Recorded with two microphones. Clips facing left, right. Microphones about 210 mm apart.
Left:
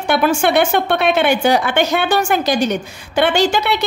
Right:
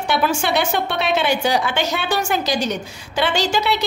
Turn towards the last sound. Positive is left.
turn(degrees=55)  # may be behind; listen again after turning